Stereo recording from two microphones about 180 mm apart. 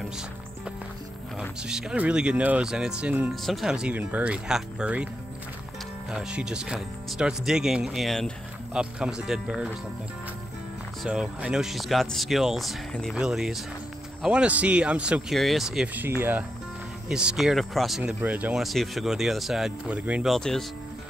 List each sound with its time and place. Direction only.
1.4 s speech: 5° right (ahead or behind)
6.1 s speech: 5° right (ahead or behind)
11.1 s speech: 5° right (ahead or behind)